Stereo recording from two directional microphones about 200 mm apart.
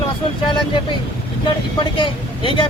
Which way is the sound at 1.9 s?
25° left (ahead or behind).